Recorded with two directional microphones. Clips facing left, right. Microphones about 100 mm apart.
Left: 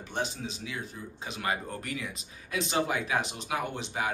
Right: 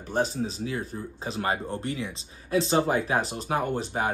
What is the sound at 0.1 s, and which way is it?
Speech, 40° right (ahead or behind).